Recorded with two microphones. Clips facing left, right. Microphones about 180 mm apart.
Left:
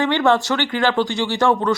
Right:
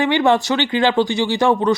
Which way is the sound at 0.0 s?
15° right (ahead or behind).